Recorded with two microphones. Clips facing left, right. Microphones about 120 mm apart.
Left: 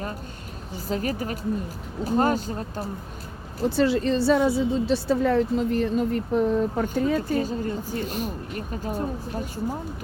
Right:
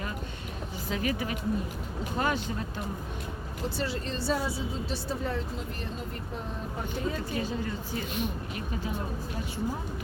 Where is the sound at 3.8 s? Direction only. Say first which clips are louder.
Left 14 dB; 90° left.